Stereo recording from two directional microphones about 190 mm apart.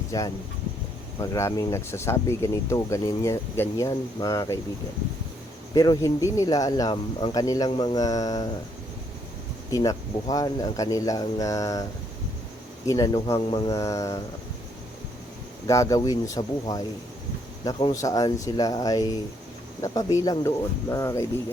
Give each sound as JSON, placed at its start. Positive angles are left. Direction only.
{"t": 0.1, "sound": "speech", "side_deg": 20}
{"t": 5.7, "sound": "speech", "side_deg": 20}
{"t": 9.7, "sound": "speech", "side_deg": 20}
{"t": 12.9, "sound": "speech", "side_deg": 20}
{"t": 15.6, "sound": "speech", "side_deg": 15}